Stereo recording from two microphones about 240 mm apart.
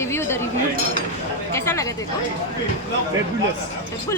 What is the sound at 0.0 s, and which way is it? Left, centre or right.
Chink, centre.